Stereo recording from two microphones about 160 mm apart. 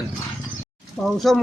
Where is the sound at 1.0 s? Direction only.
Centre (ahead or behind).